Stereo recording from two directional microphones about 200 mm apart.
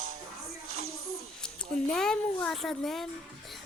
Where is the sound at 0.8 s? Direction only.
90° right.